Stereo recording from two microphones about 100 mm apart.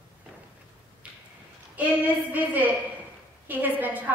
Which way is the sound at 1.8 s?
15° right (ahead or behind).